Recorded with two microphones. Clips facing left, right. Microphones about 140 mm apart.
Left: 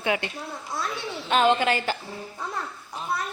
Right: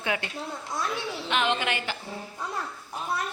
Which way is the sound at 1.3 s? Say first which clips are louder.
Left 7 dB; 35° left (ahead or behind).